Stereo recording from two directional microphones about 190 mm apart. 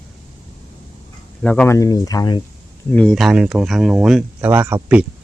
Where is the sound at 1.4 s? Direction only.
10° left (ahead or behind).